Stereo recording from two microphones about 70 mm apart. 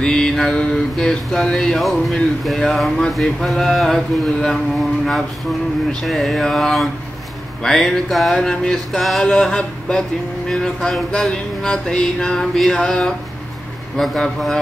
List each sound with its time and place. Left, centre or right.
0.0 s mantra: centre
2.4 s speech: centre
7.6 s mantra: centre
9.2 s mantra: centre